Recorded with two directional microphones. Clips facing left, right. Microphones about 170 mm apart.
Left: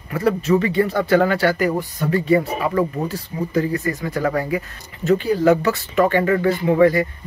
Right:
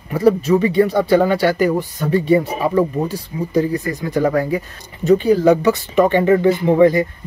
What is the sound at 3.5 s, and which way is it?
Speech, 15° right (ahead or behind).